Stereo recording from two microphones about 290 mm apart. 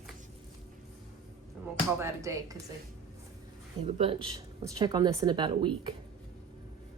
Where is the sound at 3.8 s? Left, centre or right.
Centre.